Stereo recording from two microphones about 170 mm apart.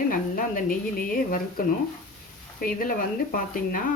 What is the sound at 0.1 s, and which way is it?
Speech, 55° left (ahead or behind).